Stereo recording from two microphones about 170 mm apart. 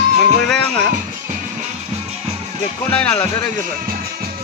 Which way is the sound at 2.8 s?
10° left (ahead or behind).